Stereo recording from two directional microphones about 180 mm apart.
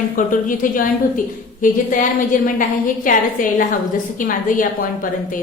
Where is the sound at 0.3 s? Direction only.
50° left (ahead or behind).